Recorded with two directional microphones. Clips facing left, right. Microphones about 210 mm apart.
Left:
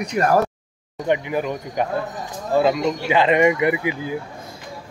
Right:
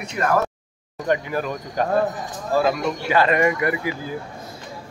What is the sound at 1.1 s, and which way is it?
Speech, 15° left (ahead or behind).